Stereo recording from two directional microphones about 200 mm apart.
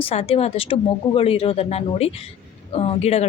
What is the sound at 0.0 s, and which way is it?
A woman's voice, 30° left (ahead or behind).